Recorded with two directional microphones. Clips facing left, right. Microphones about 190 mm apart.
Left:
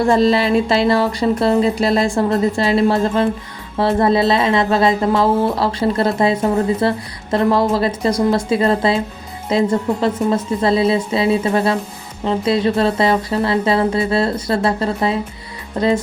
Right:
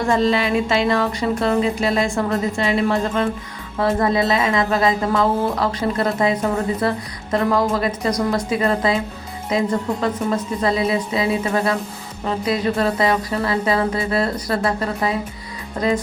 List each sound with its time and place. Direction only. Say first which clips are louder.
0.1 s a woman's voice: left 2 dB; 35° left (ahead or behind)